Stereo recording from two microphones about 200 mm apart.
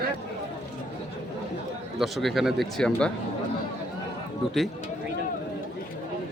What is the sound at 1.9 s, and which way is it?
Speech, centre (ahead or behind).